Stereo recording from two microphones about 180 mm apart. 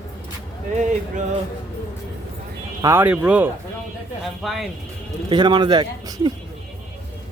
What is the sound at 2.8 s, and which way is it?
A man's voice, 10° right (ahead or behind).